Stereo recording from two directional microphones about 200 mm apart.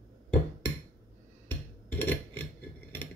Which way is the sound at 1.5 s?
10° left (ahead or behind).